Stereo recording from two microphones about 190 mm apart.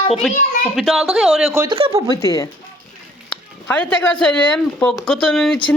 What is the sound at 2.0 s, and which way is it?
Speech, 20° left (ahead or behind).